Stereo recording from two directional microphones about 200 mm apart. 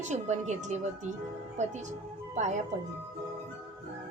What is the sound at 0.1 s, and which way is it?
Speech, 35° right (ahead or behind).